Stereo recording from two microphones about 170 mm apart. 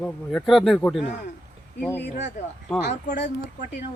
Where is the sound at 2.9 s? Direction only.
80° left.